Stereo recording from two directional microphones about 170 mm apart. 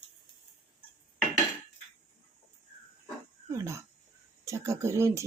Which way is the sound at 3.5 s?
15° right (ahead or behind).